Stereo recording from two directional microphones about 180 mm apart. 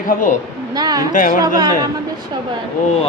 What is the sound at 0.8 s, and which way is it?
Speech, 20° right (ahead or behind).